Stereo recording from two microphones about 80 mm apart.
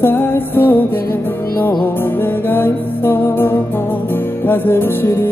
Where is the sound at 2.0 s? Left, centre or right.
Left.